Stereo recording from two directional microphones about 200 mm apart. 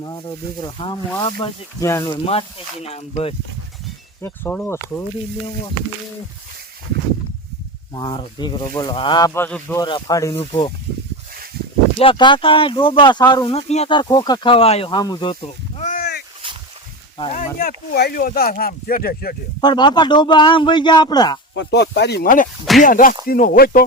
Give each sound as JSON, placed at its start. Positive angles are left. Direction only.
{"t": 0.0, "sound": "speech", "side_deg": 20}
{"t": 4.2, "sound": "speech", "side_deg": 10}
{"t": 7.9, "sound": "speech", "side_deg": 20}
{"t": 11.6, "sound": "a sound", "side_deg": -50}
{"t": 11.9, "sound": "speech", "side_deg": 25}
{"t": 17.2, "sound": "speech", "side_deg": 35}
{"t": 19.6, "sound": "speech", "side_deg": 20}
{"t": 21.5, "sound": "speech", "side_deg": 60}